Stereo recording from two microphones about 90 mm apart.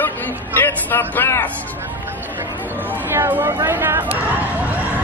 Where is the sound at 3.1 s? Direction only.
20° right (ahead or behind).